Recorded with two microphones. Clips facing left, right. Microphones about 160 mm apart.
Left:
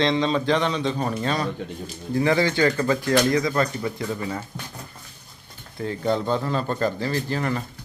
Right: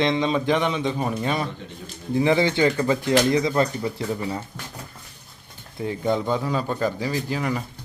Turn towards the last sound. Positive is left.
turn(degrees=-10)  # may be behind; listen again after turning